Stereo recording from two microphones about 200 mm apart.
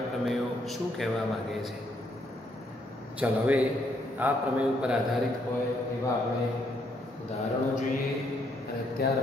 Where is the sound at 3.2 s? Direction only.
5° right (ahead or behind).